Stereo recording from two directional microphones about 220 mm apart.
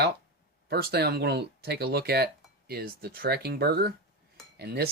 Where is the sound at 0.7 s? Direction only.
45° right (ahead or behind).